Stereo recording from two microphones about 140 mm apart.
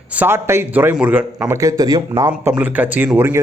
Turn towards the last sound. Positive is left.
turn(degrees=-15)  # may be behind; listen again after turning